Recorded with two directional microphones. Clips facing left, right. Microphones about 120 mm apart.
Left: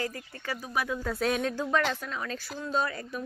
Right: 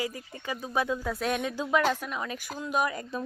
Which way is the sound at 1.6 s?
15° right (ahead or behind).